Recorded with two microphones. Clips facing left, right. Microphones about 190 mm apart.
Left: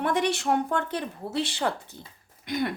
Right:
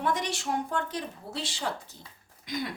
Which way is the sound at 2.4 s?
60° left (ahead or behind).